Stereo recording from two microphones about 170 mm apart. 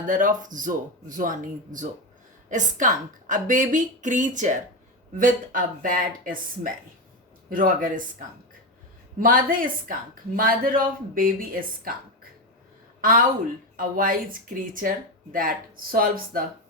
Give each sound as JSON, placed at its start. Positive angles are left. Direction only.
{"t": 0.1, "sound": "a woman's voice", "side_deg": -50}
{"t": 9.2, "sound": "speech", "side_deg": -55}
{"t": 13.0, "sound": "a woman's voice", "side_deg": -55}